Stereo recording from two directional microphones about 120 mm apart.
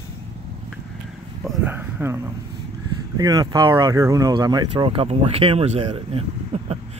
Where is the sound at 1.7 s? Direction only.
20° right (ahead or behind).